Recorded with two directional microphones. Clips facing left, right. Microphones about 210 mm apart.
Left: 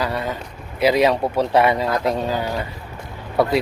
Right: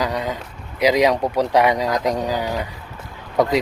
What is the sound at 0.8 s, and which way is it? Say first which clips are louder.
Speech: even; 15° right (ahead or behind).